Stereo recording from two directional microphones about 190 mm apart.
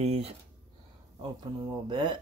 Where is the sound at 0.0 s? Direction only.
35° right (ahead or behind).